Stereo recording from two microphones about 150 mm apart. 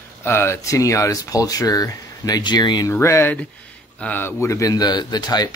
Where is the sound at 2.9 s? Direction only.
15° left (ahead or behind).